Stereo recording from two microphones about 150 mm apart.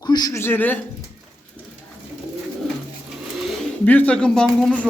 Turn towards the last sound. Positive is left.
turn(degrees=5)  # may be behind; listen again after turning